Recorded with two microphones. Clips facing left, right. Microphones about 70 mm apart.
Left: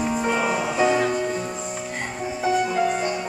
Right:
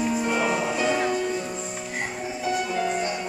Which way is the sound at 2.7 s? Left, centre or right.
Centre.